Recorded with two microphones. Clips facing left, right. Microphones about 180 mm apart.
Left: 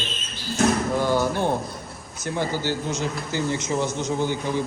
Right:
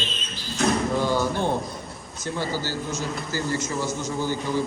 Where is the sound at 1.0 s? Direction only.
15° left (ahead or behind).